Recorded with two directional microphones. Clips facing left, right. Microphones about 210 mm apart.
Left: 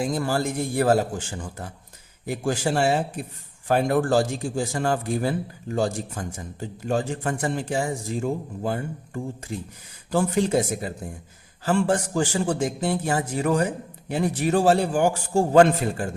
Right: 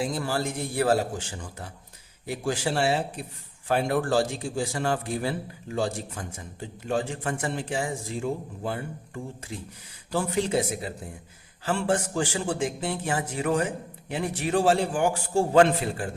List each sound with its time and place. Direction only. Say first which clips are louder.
0.0 s a man's voice: left 3 dB; 45° left (ahead or behind)